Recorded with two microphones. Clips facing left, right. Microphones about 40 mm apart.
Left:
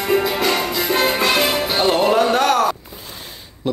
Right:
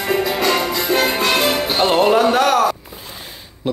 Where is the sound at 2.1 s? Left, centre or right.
Centre.